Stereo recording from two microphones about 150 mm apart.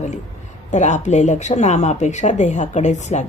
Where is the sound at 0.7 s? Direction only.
50° left (ahead or behind).